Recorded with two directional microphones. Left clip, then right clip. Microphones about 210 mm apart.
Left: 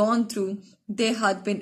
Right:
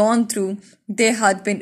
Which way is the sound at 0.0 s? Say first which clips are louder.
Right 5 dB; 35° right (ahead or behind).